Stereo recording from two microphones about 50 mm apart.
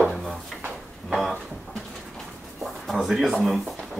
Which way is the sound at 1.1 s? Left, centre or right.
Centre.